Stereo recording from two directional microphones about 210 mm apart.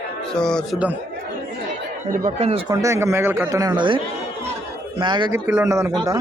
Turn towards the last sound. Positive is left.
turn(degrees=-15)  # may be behind; listen again after turning